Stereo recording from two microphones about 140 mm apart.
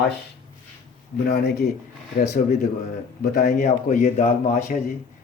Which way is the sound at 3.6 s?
55° left (ahead or behind).